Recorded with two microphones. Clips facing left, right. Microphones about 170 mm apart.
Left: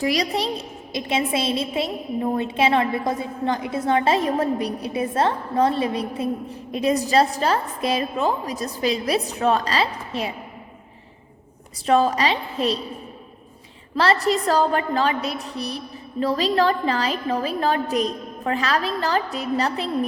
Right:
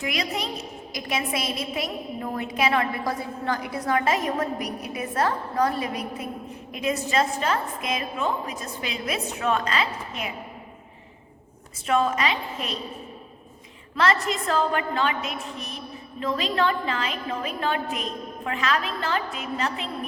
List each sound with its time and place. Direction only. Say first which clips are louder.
0.0 s a woman's voice: left 6 dB; 35° left (ahead or behind)
11.9 s a woman's voice: left 4 dB; 35° left (ahead or behind)
13.9 s a woman's voice: left 4 dB; 30° left (ahead or behind)